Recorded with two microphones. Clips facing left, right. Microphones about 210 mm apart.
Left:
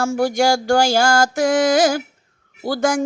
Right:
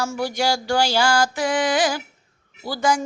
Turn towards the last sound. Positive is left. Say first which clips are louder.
# left 4 dB
turn(degrees=50)  # may be behind; listen again after turning